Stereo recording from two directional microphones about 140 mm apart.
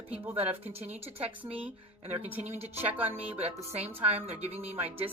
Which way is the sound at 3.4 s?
50° right (ahead or behind).